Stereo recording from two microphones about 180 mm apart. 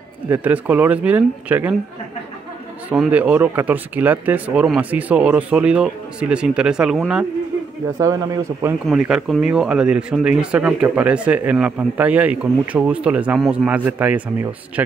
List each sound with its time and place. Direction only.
0.3 s speech: 10° right (ahead or behind)
2.9 s speech: 10° right (ahead or behind)
8.0 s speech: 15° right (ahead or behind)
8.8 s speech: 5° right (ahead or behind)